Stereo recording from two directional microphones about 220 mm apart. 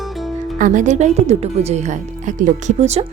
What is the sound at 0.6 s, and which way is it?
A woman's voice, 35° right (ahead or behind).